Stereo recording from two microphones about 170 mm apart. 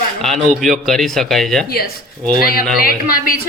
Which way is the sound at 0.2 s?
Centre (ahead or behind).